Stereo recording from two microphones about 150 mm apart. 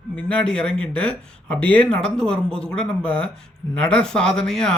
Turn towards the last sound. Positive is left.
turn(degrees=5)  # may be behind; listen again after turning